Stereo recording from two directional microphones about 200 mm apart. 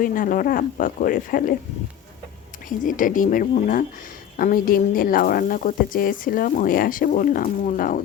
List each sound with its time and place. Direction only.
0.0 s speech: 40° left (ahead or behind)
2.6 s speech: 40° left (ahead or behind)